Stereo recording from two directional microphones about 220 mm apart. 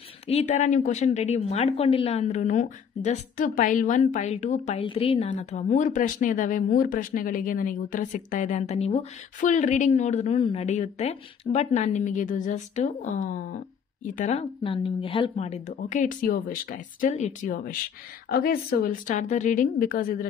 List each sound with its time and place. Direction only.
0.3 s a woman's voice: 30° left (ahead or behind)